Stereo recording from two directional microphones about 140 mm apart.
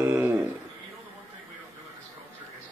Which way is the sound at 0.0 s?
15° right (ahead or behind).